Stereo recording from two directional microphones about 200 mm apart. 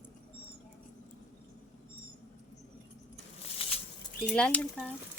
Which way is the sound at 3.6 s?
30° left (ahead or behind).